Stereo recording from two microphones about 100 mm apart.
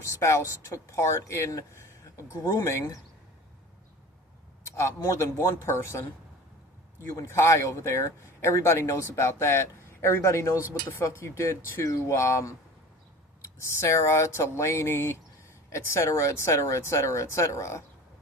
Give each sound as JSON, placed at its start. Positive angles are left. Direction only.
{"t": 0.0, "sound": "speech", "side_deg": 30}
{"t": 4.6, "sound": "a sound", "side_deg": 25}
{"t": 4.9, "sound": "speech", "side_deg": 30}
{"t": 7.2, "sound": "speech", "side_deg": 25}